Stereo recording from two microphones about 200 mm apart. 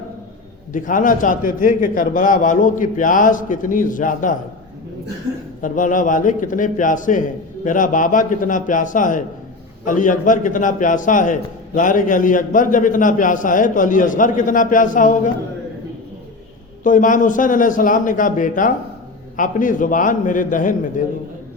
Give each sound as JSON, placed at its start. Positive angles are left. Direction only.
{"t": 0.7, "sound": "a man's voice", "side_deg": 40}
{"t": 5.6, "sound": "a man's voice", "side_deg": 40}
{"t": 16.8, "sound": "a man's voice", "side_deg": 40}